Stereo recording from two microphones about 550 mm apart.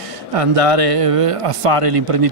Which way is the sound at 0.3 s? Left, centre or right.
Right.